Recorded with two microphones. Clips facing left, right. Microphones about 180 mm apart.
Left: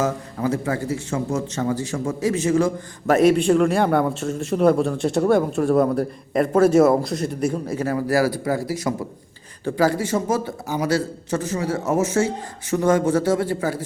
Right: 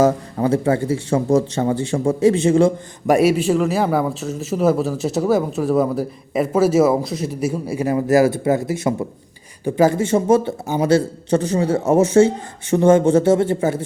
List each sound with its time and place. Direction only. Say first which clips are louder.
0.0 s speech: right 6 dB; 30° right (ahead or behind)
3.1 s a man's voice: right 1 dB; 10° right (ahead or behind); by 13.8 s 25° right (ahead or behind)